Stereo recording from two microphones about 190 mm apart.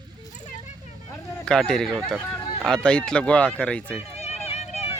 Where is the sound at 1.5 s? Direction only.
5° left (ahead or behind).